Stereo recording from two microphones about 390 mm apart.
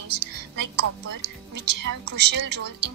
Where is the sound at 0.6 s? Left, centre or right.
Right.